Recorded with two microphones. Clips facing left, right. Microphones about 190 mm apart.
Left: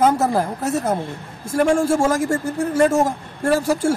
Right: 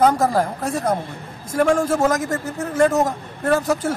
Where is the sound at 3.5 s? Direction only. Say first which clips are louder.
Left 1 dB; 10° left (ahead or behind).